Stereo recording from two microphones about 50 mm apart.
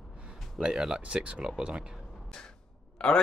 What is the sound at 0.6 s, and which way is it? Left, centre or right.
Speech, centre.